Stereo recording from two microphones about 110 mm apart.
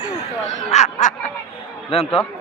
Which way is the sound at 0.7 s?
90° left.